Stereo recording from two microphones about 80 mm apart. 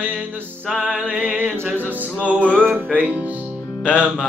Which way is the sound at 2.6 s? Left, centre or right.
Right.